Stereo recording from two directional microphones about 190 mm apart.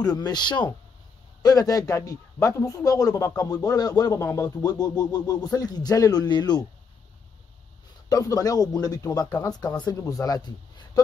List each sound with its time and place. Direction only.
0.0 s a man's voice: 20° left (ahead or behind)
8.1 s a man's voice: 20° left (ahead or behind)